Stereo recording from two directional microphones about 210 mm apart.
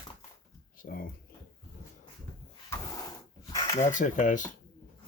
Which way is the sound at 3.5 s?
15° left (ahead or behind).